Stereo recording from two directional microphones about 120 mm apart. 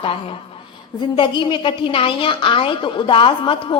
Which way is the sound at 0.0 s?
50° left (ahead or behind).